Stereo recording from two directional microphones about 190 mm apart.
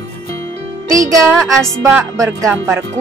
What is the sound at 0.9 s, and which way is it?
Speech, 15° right (ahead or behind).